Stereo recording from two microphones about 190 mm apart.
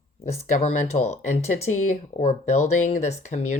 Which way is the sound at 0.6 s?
35° left (ahead or behind).